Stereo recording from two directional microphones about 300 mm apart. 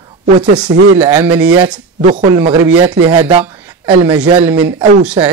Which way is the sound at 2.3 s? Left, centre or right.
Centre.